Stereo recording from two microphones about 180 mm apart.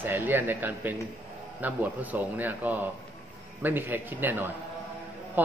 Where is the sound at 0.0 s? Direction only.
10° right (ahead or behind).